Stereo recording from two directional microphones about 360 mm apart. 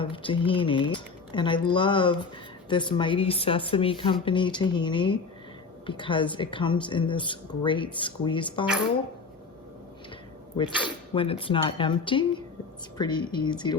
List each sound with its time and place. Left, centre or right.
0.0 s speech: centre
10.8 s speech: centre